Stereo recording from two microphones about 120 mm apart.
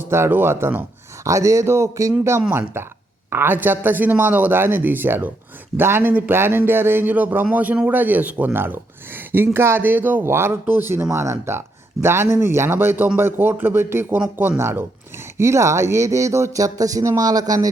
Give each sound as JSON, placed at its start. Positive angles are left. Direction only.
{"t": 0.0, "sound": "speech", "side_deg": -20}